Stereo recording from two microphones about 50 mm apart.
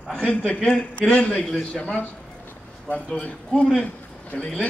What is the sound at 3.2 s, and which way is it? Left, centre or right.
A man's voice, centre.